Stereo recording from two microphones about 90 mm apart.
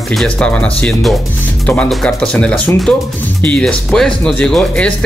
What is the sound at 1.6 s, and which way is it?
Speech, 15° left (ahead or behind).